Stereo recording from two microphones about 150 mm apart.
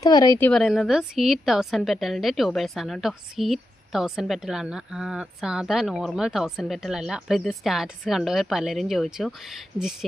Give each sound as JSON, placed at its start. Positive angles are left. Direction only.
{"t": 0.0, "sound": "speech", "side_deg": 25}
{"t": 0.3, "sound": "a woman's voice", "side_deg": 10}
{"t": 0.6, "sound": "a woman's voice", "side_deg": 0}